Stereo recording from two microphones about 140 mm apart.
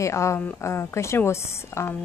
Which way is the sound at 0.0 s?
20° left (ahead or behind).